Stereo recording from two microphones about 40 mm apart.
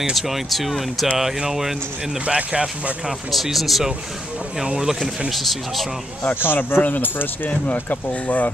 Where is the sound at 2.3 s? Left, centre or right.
Right.